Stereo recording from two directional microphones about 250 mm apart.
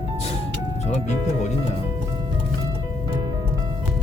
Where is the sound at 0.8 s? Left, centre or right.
Left.